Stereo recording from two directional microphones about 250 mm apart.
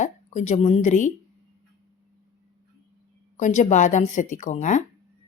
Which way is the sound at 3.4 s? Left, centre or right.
Left.